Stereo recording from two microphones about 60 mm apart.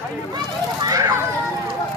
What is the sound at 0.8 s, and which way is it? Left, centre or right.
Vehicle, right.